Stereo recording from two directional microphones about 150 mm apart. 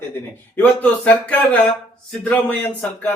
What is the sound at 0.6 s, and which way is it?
Speech, 10° left (ahead or behind).